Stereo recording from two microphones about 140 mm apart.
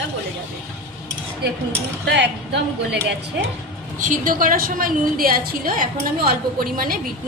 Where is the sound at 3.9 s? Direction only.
70° right (ahead or behind); by 6.9 s 90° right.